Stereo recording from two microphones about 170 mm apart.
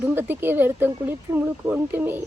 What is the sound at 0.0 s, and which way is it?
Speech, 10° right (ahead or behind).